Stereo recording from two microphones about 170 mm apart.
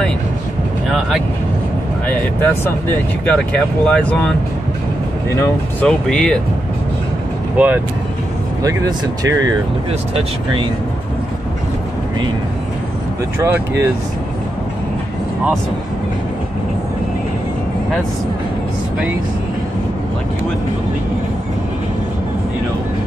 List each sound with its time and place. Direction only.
2.0 s speech: 10° left (ahead or behind)
5.4 s speech: 10° left (ahead or behind)
7.5 s speech: 10° right (ahead or behind)
8.6 s speech: 20° right (ahead or behind)
13.4 s speech: 15° right (ahead or behind)